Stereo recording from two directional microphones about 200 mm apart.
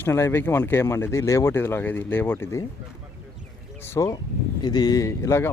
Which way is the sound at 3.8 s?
15° left (ahead or behind).